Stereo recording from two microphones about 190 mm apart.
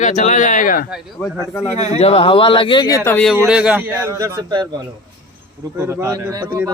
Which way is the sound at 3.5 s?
5° right (ahead or behind).